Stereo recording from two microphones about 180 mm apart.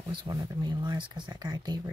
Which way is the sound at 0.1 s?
20° right (ahead or behind).